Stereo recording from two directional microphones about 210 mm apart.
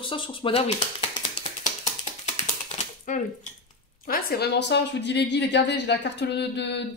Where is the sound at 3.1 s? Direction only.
40° left (ahead or behind).